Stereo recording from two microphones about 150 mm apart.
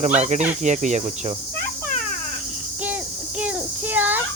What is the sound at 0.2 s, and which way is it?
Speech, 50° right (ahead or behind).